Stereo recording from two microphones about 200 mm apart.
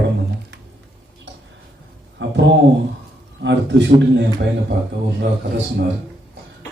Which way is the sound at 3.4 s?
60° right (ahead or behind).